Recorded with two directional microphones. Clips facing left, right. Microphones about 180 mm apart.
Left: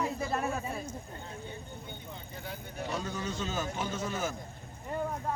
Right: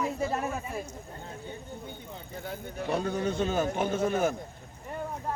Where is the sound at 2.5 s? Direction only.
55° right (ahead or behind).